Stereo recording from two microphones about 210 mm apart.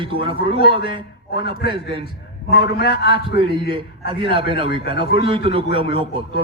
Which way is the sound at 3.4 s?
25° right (ahead or behind).